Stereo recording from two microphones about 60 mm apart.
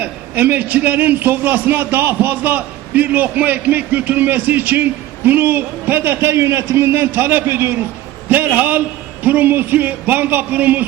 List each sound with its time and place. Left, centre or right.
0.0 s a man's voice: right